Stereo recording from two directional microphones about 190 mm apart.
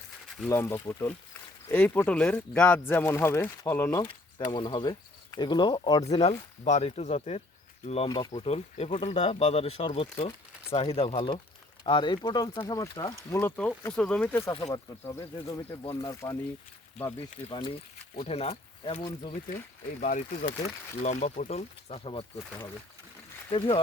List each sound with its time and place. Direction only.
0.4 s speech: 15° left (ahead or behind)
4.0 s a sound: 25° left (ahead or behind)
4.5 s speech: 25° left (ahead or behind)
6.1 s speech: 35° left (ahead or behind); by 13.5 s 20° left (ahead or behind)
13.6 s speech: 5° left (ahead or behind); by 16.1 s 25° left (ahead or behind)
17.2 s speech: 30° left (ahead or behind)
20.0 s speech: 40° left (ahead or behind)
23.5 s speech: 30° left (ahead or behind)